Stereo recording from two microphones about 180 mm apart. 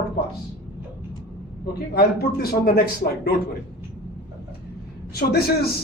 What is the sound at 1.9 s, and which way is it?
Speech, 60° left (ahead or behind).